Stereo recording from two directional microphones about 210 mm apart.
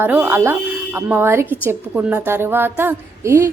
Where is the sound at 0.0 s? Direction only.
10° right (ahead or behind).